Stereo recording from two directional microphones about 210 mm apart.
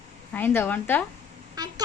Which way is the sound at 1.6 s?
20° right (ahead or behind).